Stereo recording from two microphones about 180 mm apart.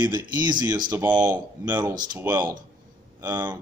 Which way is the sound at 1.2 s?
10° right (ahead or behind).